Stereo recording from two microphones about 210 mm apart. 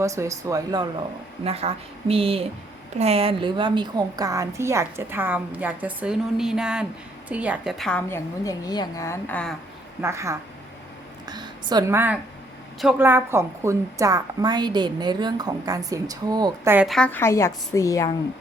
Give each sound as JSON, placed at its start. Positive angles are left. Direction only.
{"t": 0.0, "sound": "a woman's voice", "side_deg": -15}
{"t": 1.5, "sound": "a woman's voice", "side_deg": -30}
{"t": 10.0, "sound": "a woman's voice", "side_deg": -15}
{"t": 16.7, "sound": "a woman's voice", "side_deg": 0}